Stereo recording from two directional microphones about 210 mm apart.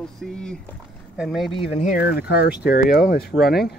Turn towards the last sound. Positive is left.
turn(degrees=50)  # may be behind; listen again after turning